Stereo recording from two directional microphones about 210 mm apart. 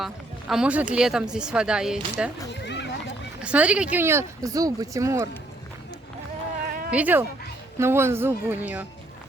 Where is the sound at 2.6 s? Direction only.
55° left (ahead or behind).